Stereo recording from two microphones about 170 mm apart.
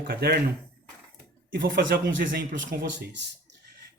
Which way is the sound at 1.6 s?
90° right.